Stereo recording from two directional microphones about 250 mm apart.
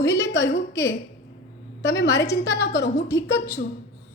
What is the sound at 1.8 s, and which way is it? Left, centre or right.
A woman's voice, left.